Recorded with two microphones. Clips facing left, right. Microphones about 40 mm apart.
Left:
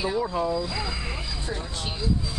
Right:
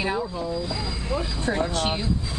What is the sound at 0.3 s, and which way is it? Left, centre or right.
Speech, left.